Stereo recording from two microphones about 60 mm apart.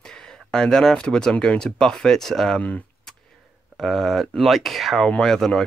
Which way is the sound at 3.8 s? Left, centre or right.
Centre.